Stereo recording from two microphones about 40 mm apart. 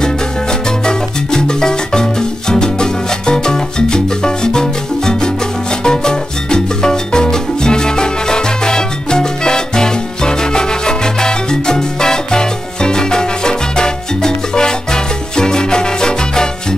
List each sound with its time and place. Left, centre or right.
0.8 s music: centre
2.5 s salsa music: centre